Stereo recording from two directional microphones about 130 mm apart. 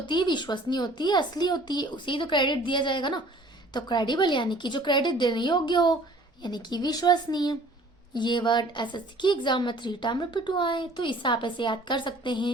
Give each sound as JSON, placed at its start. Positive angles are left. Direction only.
{"t": 0.0, "sound": "a woman's voice", "side_deg": 35}